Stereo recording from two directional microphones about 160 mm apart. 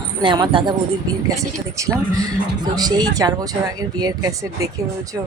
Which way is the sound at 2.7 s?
25° right (ahead or behind).